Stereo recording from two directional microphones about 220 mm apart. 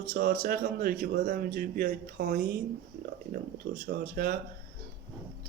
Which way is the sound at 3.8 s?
45° right (ahead or behind).